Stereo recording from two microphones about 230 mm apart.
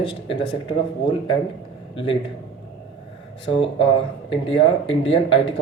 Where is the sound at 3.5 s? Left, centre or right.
Left.